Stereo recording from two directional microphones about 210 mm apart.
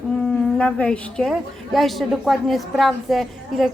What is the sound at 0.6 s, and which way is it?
A woman's voice, 5° left (ahead or behind).